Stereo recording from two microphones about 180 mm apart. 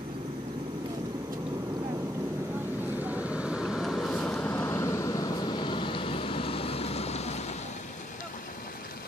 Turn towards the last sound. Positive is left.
turn(degrees=35)  # may be behind; listen again after turning